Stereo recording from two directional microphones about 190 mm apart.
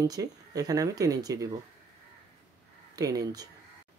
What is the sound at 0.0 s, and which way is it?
Speech, 20° right (ahead or behind).